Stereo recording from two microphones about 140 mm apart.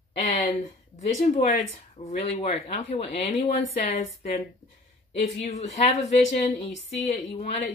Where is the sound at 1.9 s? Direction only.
45° left (ahead or behind).